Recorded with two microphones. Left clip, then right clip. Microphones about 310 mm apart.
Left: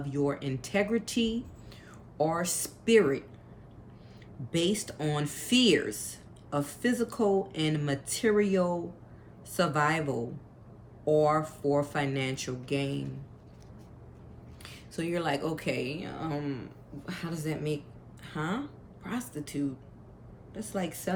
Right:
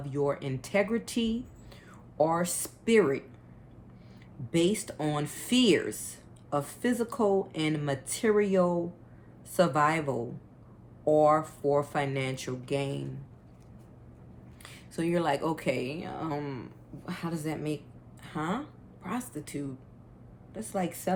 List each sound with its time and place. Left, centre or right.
0.0 s speech: centre
4.5 s speech: centre
14.6 s speech: centre
18.2 s a sound: centre
19.0 s a woman's voice: centre